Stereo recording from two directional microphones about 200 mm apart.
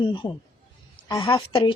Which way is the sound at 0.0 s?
25° left (ahead or behind).